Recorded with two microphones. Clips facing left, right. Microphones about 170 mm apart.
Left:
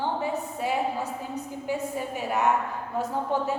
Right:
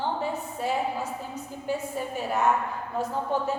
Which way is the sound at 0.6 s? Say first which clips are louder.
Even; 15° left (ahead or behind).